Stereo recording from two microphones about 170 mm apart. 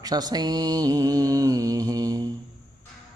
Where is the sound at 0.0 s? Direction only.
25° right (ahead or behind).